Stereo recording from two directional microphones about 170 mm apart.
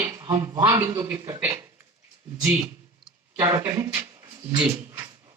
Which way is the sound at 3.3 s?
15° right (ahead or behind).